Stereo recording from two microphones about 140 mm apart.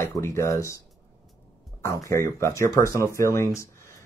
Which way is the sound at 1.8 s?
20° left (ahead or behind).